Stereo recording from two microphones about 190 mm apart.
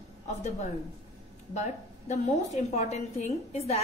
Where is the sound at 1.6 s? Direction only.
40° left (ahead or behind).